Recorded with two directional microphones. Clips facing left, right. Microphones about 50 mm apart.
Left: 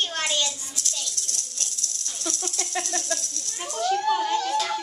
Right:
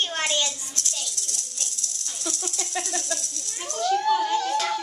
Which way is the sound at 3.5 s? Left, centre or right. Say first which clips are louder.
Even; centre.